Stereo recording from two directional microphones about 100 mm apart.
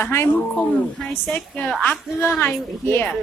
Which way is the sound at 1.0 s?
Centre (ahead or behind).